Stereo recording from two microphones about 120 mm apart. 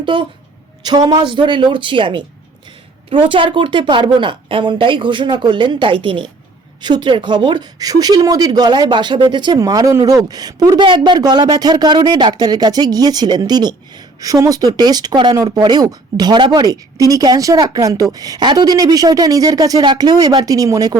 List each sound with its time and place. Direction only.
0.0 s a woman's voice: 45° right (ahead or behind)